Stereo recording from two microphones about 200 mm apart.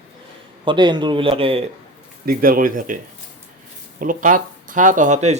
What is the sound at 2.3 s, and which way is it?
Speech, 45° right (ahead or behind).